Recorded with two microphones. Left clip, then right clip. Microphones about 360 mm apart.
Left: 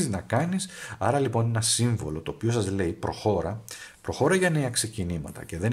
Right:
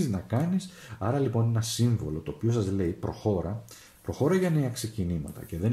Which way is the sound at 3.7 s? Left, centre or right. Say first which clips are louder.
Left 5 dB; left.